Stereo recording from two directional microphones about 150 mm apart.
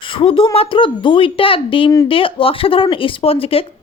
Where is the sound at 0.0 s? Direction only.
35° left (ahead or behind).